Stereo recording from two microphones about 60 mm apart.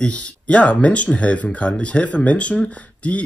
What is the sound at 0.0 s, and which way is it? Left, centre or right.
Speech, left.